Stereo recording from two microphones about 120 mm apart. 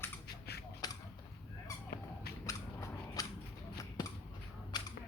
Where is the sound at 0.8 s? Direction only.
35° left (ahead or behind).